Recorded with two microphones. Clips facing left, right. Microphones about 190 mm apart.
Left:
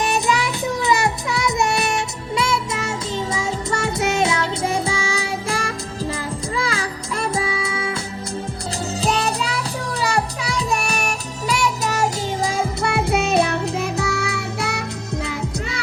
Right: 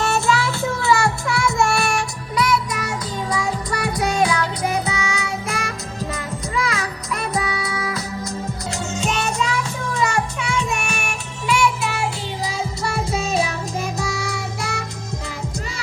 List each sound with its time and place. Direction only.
0.0 s child singing: 15° left (ahead or behind)
8.9 s music: 35° left (ahead or behind); by 14.8 s 60° left (ahead or behind)